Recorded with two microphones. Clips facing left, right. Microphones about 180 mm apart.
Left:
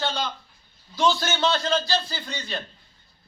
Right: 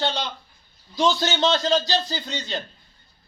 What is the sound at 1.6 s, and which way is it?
Speech, 35° right (ahead or behind).